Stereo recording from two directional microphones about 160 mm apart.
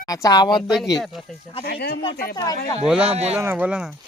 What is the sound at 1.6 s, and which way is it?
Speech, 70° left (ahead or behind).